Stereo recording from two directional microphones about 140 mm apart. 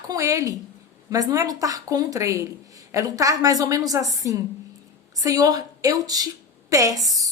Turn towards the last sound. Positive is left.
turn(degrees=-25)  # may be behind; listen again after turning